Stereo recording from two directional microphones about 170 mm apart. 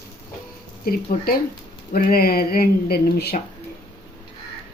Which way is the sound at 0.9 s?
60° left (ahead or behind).